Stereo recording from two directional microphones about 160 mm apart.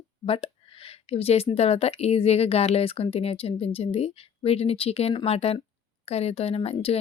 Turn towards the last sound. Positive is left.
turn(degrees=40)  # may be behind; listen again after turning